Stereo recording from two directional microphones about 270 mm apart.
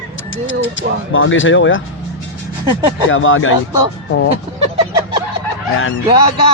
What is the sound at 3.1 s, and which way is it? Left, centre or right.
Speech, left.